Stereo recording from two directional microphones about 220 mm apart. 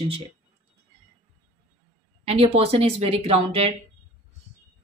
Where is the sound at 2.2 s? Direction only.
25° right (ahead or behind).